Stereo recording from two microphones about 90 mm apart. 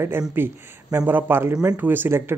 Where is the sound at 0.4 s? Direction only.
20° right (ahead or behind).